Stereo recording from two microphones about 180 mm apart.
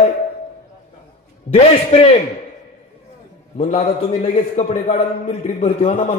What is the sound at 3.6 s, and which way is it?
A man's voice, 40° left (ahead or behind).